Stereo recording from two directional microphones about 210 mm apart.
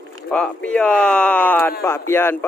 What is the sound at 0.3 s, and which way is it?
Speech, 5° left (ahead or behind).